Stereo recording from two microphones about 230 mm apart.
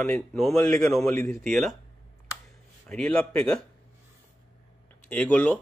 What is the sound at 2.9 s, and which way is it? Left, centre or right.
Speech, centre.